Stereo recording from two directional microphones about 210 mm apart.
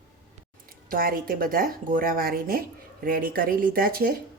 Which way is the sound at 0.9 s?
45° right (ahead or behind).